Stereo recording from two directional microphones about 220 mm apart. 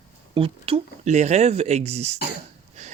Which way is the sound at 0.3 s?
25° right (ahead or behind).